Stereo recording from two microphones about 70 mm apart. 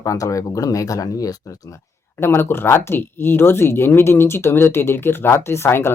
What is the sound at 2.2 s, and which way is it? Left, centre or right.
Speech, left.